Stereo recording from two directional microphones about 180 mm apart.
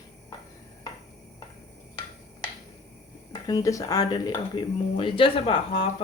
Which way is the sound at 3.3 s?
20° left (ahead or behind).